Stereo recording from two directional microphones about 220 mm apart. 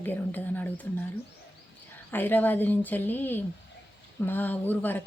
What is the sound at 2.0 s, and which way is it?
A woman's voice, 10° left (ahead or behind).